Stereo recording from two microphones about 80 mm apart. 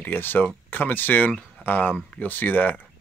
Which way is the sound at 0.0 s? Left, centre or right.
Left.